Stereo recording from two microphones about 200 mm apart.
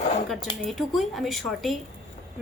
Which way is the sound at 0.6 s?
Centre (ahead or behind).